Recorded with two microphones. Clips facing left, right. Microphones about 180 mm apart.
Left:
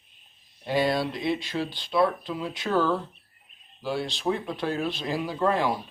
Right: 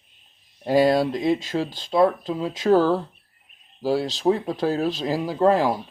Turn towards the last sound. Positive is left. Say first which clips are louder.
# right 6 dB
turn(degrees=-40)  # may be behind; listen again after turning